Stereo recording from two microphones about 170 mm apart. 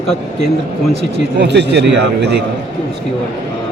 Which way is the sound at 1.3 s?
85° right.